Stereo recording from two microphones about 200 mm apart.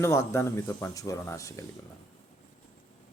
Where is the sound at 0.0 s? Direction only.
15° left (ahead or behind).